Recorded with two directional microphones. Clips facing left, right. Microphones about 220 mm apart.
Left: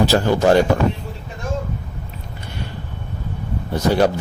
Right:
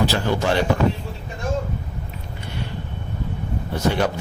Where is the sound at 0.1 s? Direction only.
45° left (ahead or behind).